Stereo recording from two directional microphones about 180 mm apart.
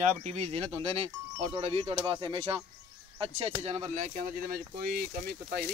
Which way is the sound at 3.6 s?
40° right (ahead or behind).